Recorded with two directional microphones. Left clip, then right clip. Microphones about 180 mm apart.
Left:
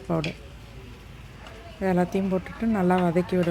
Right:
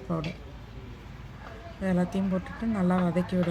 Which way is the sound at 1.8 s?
40° left (ahead or behind).